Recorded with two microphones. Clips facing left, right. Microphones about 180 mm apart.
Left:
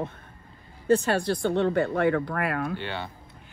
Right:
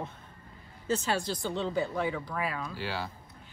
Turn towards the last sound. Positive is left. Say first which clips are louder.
# left 2 dB
turn(degrees=0)  # may be behind; listen again after turning